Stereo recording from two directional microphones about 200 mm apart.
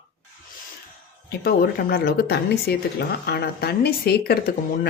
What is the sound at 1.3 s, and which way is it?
Speech, 50° left (ahead or behind).